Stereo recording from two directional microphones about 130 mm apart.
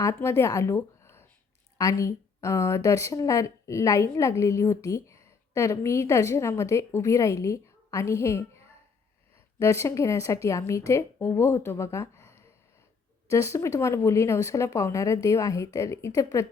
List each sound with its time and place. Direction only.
0.0 s a woman's voice: 20° left (ahead or behind)